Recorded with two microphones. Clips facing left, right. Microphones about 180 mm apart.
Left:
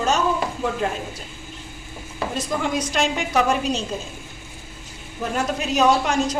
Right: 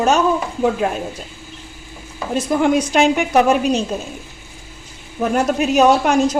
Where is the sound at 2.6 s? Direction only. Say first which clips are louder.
Right 9 dB; 60° right (ahead or behind).